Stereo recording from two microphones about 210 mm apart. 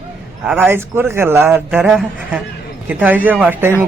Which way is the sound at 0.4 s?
10° right (ahead or behind).